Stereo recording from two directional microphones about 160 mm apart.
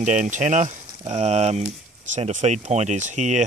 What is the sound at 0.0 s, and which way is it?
Speech, 50° right (ahead or behind).